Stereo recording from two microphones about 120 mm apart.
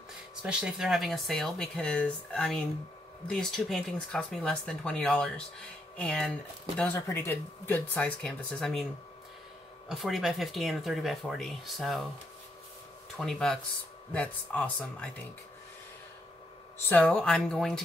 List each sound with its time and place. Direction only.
0.4 s speech: 5° right (ahead or behind)
6.8 s speech: 20° left (ahead or behind); by 8.8 s 5° left (ahead or behind)
9.8 s speech: centre (ahead or behind)
13.2 s speech: 5° left (ahead or behind)
17.0 s speech: 5° left (ahead or behind)